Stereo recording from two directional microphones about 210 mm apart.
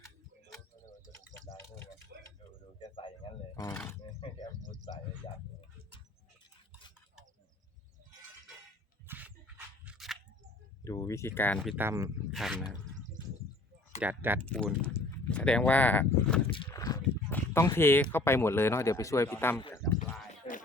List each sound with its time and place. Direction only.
1.4 s a sound: 10° left (ahead or behind)
2.7 s a sound: 25° left (ahead or behind)
4.2 s a sound: 25° left (ahead or behind)
9.0 s dog: 10° right (ahead or behind)
9.8 s scissors: centre (ahead or behind)
10.8 s speech: 15° left (ahead or behind)
11.8 s speech: 15° right (ahead or behind)
12.3 s speech: centre (ahead or behind)
14.0 s speech: 10° right (ahead or behind)
14.4 s speech: 5° left (ahead or behind)
16.5 s speech: 20° left (ahead or behind)
20.4 s a sound: 30° left (ahead or behind)